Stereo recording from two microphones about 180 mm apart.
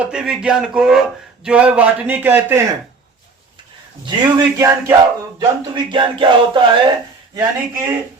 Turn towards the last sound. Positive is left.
turn(degrees=-20)  # may be behind; listen again after turning